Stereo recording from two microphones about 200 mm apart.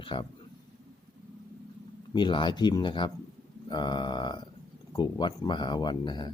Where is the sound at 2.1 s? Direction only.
25° left (ahead or behind).